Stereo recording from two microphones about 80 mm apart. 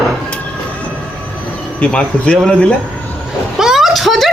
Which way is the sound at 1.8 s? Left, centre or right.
Centre.